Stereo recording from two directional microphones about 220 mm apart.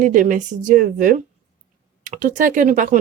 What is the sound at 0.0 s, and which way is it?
A woman's voice, 35° right (ahead or behind).